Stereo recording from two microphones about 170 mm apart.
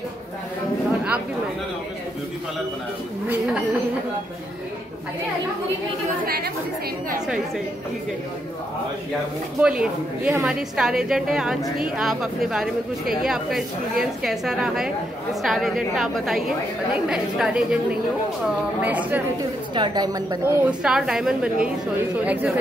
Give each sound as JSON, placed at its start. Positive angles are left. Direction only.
{"t": 6.2, "sound": "a woman's voice", "side_deg": -60}
{"t": 9.6, "sound": "a woman's voice", "side_deg": -5}
{"t": 18.8, "sound": "speech", "side_deg": -10}
{"t": 19.7, "sound": "a woman's voice", "side_deg": -25}
{"t": 20.6, "sound": "a woman's voice", "side_deg": -5}